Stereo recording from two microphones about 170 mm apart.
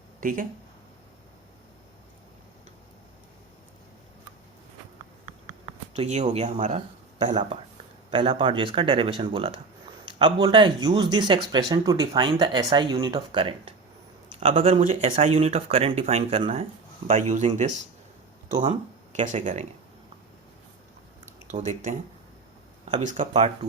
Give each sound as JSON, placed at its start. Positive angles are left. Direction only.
{"t": 0.2, "sound": "speech", "side_deg": -55}
{"t": 5.9, "sound": "speech", "side_deg": -40}
{"t": 8.1, "sound": "speech", "side_deg": -30}
{"t": 19.1, "sound": "speech", "side_deg": -45}
{"t": 21.5, "sound": "speech", "side_deg": -45}
{"t": 23.0, "sound": "speech", "side_deg": -45}